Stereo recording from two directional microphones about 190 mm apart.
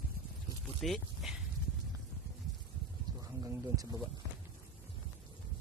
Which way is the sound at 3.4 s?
20° right (ahead or behind).